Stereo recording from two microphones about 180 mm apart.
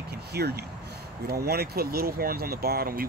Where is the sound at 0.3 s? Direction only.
65° right (ahead or behind).